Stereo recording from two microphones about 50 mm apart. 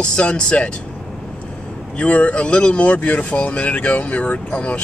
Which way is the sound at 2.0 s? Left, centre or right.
Left.